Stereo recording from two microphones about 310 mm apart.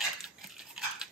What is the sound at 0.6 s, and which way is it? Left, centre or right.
Dog, centre.